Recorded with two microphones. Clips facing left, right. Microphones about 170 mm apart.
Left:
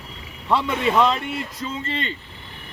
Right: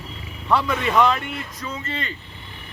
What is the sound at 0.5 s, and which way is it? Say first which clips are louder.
Speech: even; 25° left (ahead or behind).